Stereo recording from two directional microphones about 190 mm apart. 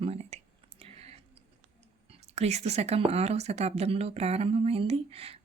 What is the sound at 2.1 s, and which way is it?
A woman's voice, 35° right (ahead or behind).